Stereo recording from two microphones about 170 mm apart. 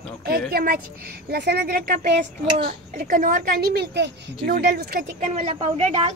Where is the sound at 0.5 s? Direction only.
60° right (ahead or behind).